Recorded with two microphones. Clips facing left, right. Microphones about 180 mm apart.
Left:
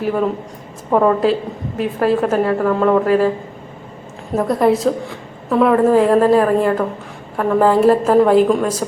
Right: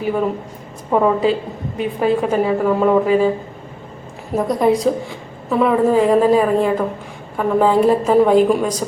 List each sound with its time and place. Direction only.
0.9 s a woman's voice: centre (ahead or behind)
4.4 s a woman's voice: centre (ahead or behind)